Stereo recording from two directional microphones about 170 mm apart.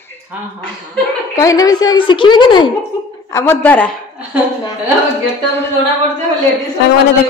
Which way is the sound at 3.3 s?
15° left (ahead or behind).